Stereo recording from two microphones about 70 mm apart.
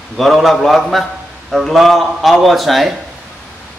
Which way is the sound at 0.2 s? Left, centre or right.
Centre.